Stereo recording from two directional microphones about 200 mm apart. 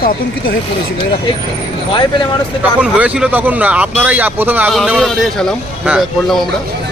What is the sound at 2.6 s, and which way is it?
Speech, 5° right (ahead or behind).